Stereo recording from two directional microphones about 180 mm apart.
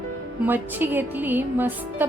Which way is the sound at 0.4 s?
10° right (ahead or behind).